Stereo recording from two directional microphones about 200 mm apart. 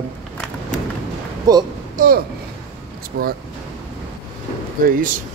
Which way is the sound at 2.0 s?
45° right (ahead or behind).